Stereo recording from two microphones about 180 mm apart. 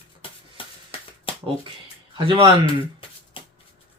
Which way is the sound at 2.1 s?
25° right (ahead or behind).